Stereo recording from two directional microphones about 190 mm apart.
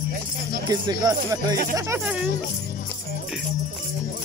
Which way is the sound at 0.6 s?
20° right (ahead or behind).